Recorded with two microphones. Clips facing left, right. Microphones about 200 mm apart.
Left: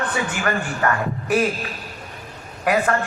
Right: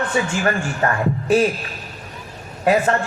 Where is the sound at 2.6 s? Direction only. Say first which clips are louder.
Right 3 dB; 25° right (ahead or behind).